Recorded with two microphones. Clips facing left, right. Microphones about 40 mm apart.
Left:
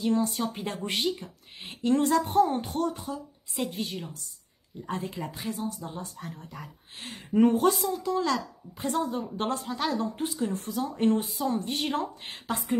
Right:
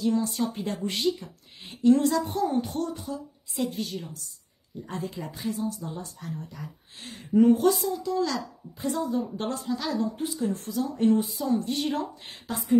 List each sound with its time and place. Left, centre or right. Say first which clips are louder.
0.0 s speech: right 1 dB; left
6.2 s speech: right 2 dB; left
6.5 s a woman's voice: right 1 dB; left